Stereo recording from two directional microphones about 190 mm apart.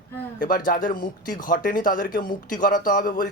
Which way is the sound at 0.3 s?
45° left (ahead or behind).